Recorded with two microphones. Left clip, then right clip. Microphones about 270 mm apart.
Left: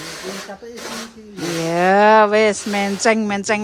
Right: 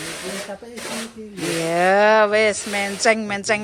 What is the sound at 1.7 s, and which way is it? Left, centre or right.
A woman's voice, centre.